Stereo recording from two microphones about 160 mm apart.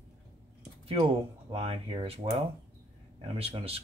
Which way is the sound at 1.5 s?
35° right (ahead or behind).